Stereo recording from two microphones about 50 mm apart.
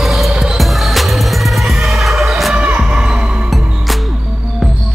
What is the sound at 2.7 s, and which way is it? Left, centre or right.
Music, centre.